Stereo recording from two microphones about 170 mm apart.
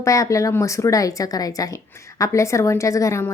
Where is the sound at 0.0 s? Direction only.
20° left (ahead or behind).